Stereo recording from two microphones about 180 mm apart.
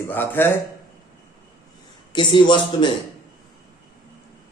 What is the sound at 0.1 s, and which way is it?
Speech, 10° left (ahead or behind).